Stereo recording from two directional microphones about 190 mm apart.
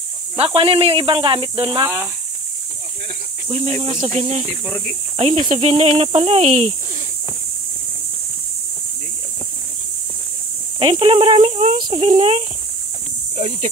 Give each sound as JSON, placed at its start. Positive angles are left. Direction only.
{"t": 0.4, "sound": "speech", "side_deg": -30}
{"t": 3.4, "sound": "speech", "side_deg": -35}
{"t": 4.6, "sound": "speech", "side_deg": 5}
{"t": 5.1, "sound": "speech", "side_deg": -35}
{"t": 10.8, "sound": "speech", "side_deg": -30}